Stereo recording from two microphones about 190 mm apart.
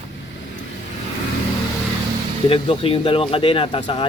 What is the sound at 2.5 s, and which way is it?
Speech, 25° left (ahead or behind).